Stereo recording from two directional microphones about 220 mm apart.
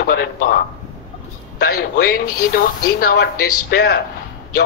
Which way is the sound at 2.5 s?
40° left (ahead or behind).